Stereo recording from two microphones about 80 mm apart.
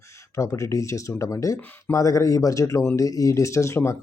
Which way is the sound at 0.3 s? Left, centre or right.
Left.